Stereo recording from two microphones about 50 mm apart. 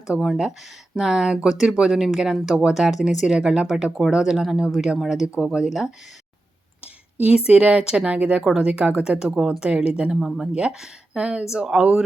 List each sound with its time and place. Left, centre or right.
0.9 s speech: centre
6.8 s speech: right
11.2 s speech: right